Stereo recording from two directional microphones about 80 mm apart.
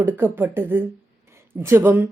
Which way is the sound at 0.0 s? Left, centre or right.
Right.